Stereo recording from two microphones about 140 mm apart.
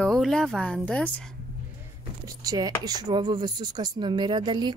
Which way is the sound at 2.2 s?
25° right (ahead or behind).